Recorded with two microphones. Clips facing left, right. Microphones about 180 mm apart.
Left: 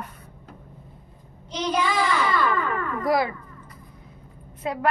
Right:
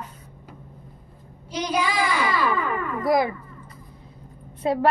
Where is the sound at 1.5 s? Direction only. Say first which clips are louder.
Even; 10° right (ahead or behind).